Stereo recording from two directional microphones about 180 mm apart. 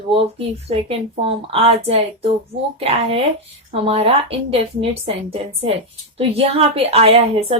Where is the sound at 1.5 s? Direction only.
35° right (ahead or behind).